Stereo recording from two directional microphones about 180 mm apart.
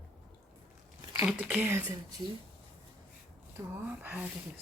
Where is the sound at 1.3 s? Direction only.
5° right (ahead or behind).